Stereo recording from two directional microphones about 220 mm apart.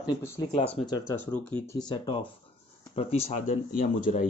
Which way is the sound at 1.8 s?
20° left (ahead or behind).